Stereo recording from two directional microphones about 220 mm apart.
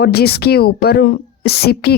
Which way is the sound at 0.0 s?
45° left (ahead or behind).